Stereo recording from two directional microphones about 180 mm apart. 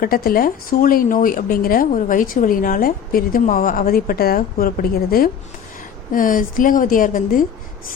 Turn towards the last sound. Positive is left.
turn(degrees=50)  # may be behind; listen again after turning